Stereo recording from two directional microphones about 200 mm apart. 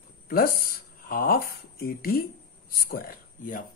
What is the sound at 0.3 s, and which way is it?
Speech, 45° left (ahead or behind).